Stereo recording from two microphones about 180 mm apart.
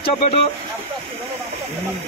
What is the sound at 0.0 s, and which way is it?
Speech, 30° left (ahead or behind).